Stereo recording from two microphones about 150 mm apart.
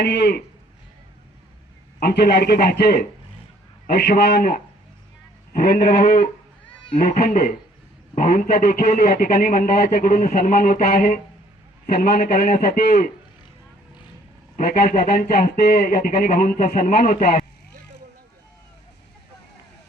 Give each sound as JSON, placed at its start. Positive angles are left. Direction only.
{"t": 0.0, "sound": "a man's voice", "side_deg": 90}
{"t": 2.0, "sound": "a man's voice", "side_deg": 90}
{"t": 7.0, "sound": "a man's voice", "side_deg": 70}
{"t": 11.9, "sound": "a man's voice", "side_deg": 90}
{"t": 14.5, "sound": "speech", "side_deg": 85}